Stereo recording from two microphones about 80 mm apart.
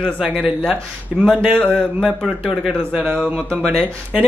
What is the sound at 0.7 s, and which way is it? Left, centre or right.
Speech, centre.